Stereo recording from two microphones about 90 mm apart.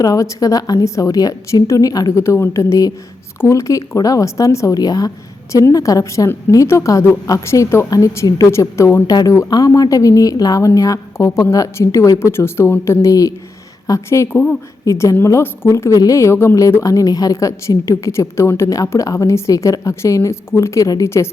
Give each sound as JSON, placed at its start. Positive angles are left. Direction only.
{"t": 0.0, "sound": "a woman's voice", "side_deg": 40}